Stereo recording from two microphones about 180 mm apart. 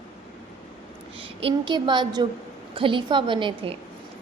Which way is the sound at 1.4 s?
30° right (ahead or behind).